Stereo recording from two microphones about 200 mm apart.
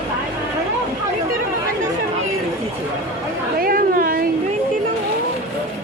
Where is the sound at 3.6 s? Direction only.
45° right (ahead or behind).